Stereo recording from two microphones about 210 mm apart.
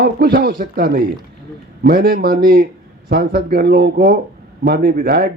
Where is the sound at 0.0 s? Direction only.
45° right (ahead or behind).